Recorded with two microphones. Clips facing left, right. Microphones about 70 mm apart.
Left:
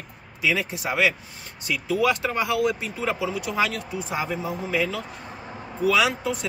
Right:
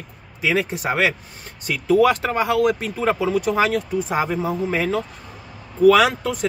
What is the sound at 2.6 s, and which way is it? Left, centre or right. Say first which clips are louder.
Speech: right 5 dB; right.